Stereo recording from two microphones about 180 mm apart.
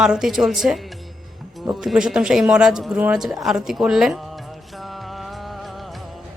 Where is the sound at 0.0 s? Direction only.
5° right (ahead or behind).